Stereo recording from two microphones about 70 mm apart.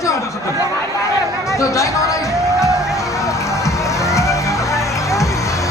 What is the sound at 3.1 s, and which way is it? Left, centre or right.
Music, left.